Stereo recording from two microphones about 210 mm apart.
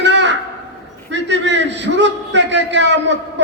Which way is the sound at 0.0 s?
60° right (ahead or behind).